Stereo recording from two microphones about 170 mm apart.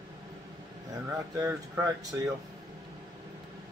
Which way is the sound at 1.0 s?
15° right (ahead or behind).